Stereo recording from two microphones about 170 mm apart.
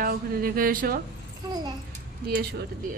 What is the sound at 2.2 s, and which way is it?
Speech, 70° right (ahead or behind).